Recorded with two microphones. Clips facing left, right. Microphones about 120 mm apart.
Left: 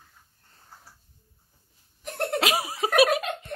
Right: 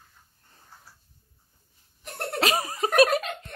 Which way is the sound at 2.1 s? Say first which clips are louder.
Left 1 dB; centre (ahead or behind).